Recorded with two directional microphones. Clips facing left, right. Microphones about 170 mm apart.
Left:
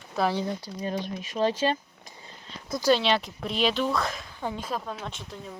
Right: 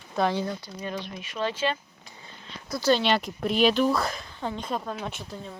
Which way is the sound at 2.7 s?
15° left (ahead or behind).